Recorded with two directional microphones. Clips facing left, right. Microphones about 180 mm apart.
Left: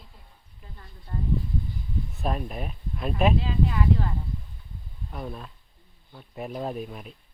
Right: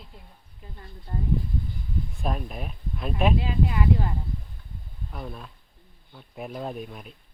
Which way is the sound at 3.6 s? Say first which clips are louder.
Right 1 dB; 15° right (ahead or behind).